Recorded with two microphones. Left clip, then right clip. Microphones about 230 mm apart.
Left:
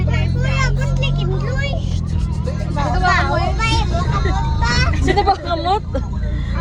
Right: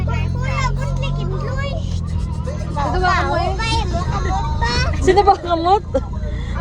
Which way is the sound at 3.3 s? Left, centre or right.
Right.